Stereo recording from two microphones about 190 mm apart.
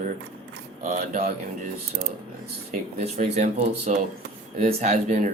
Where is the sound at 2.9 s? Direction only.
35° right (ahead or behind).